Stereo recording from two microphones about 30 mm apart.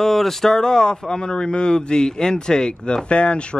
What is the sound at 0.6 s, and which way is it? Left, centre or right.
A man's voice, left.